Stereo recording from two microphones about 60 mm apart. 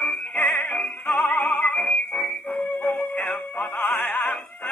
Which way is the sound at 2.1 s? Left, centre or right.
Left.